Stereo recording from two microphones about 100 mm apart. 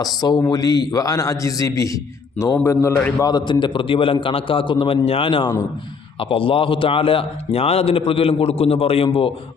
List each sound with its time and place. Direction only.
0.2 s a man's voice: 40° left (ahead or behind)
3.2 s a man's voice: 45° left (ahead or behind); by 9.0 s 75° left (ahead or behind)